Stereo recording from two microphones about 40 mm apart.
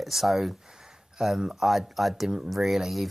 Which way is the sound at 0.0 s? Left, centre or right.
Centre.